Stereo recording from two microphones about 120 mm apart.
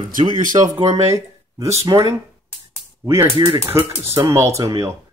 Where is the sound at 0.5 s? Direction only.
40° right (ahead or behind).